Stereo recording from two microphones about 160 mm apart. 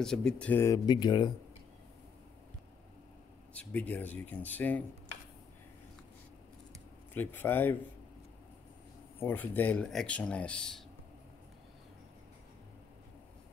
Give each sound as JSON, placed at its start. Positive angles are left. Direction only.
{"t": 0.0, "sound": "speech", "side_deg": 5}
{"t": 0.8, "sound": "speech", "side_deg": 25}
{"t": 3.5, "sound": "speech", "side_deg": 10}
{"t": 7.2, "sound": "speech", "side_deg": 10}
{"t": 9.2, "sound": "speech", "side_deg": 10}